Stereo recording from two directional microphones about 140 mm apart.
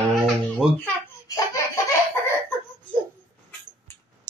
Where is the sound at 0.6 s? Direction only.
5° right (ahead or behind).